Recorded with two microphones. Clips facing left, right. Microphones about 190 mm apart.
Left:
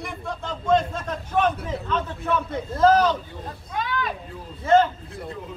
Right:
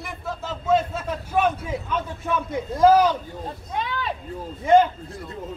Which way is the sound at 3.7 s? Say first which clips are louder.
Left 1 dB; 30° right (ahead or behind).